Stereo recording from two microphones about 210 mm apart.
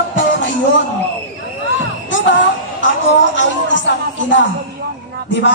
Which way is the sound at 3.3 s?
60° left (ahead or behind).